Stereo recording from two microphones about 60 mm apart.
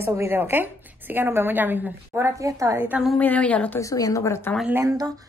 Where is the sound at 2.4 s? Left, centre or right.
Right.